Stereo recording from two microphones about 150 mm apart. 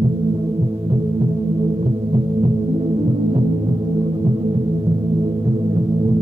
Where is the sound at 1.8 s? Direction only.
40° right (ahead or behind).